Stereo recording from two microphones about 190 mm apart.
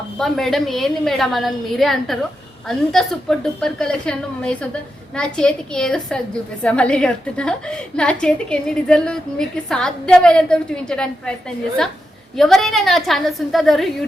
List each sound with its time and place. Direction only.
0.2 s a woman's voice: centre (ahead or behind)
12.4 s a woman's voice: centre (ahead or behind)